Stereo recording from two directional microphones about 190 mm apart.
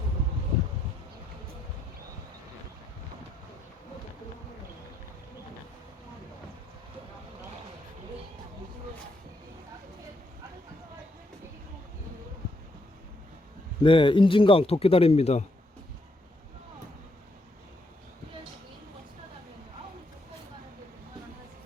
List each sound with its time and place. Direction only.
13.8 s speech: 25° left (ahead or behind)